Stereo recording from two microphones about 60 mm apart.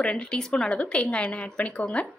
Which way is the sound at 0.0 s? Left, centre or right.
Centre.